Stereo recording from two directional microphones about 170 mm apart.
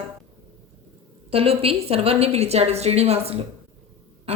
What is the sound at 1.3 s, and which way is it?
Speech, 35° right (ahead or behind).